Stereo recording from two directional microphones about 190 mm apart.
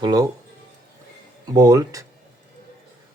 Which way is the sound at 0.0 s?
20° right (ahead or behind).